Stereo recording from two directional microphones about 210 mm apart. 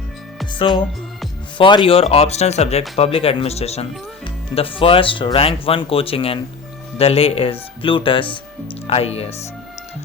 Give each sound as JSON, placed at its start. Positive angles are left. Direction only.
{"t": 1.5, "sound": "speech", "side_deg": 25}